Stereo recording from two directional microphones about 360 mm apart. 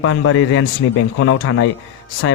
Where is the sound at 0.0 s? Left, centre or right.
Left.